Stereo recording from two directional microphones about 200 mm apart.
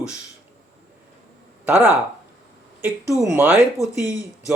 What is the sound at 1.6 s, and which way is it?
Speech, 10° right (ahead or behind).